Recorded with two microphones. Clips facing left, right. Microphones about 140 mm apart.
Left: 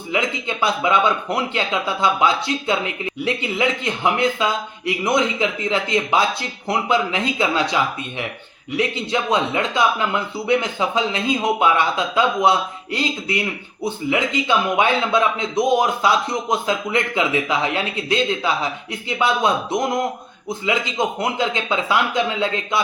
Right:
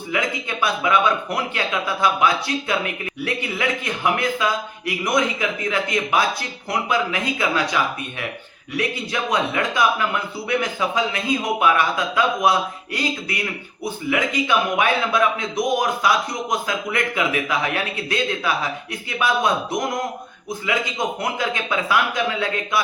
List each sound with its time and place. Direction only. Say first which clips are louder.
0.1 s a man's voice: left 2 dB; 25° left (ahead or behind)